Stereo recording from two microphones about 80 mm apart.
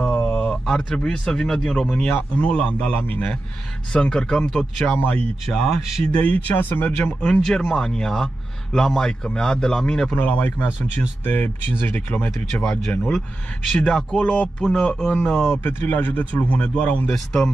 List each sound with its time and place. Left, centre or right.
0.0 s speech: centre
2.0 s speech: left
4.9 s speech: left
5.5 s speech: centre
7.4 s speech: centre
10.1 s speech: centre
12.4 s speech: centre
15.6 s speech: left
17.1 s speech: centre